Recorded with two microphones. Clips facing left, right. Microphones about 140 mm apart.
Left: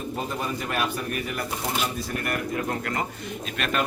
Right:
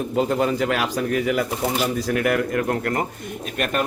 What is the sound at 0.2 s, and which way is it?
Speech, 90° right.